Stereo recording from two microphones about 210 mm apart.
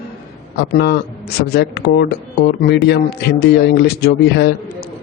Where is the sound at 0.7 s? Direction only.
50° left (ahead or behind).